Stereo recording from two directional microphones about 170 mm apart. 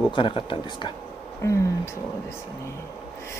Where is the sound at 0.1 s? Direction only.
30° left (ahead or behind).